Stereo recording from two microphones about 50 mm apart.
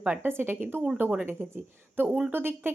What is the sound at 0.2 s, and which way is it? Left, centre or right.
Speech, right.